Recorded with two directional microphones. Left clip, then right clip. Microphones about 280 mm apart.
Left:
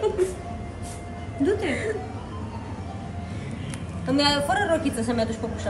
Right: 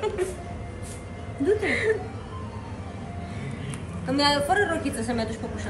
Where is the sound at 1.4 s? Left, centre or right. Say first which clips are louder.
Right 2 dB; centre.